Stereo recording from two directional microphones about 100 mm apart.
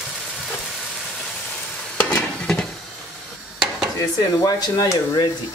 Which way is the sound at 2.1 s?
5° left (ahead or behind).